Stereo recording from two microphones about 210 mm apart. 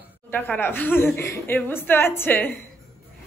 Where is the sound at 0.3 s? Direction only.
10° left (ahead or behind).